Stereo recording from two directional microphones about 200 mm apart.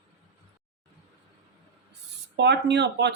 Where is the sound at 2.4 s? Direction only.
60° right (ahead or behind).